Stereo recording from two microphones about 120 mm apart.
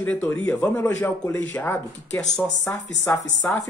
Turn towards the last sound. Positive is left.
turn(degrees=20)  # may be behind; listen again after turning